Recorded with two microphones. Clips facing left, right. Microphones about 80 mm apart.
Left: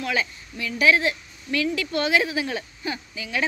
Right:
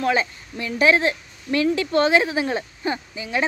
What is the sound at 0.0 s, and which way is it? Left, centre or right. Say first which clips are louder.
Speech: right 5 dB; right.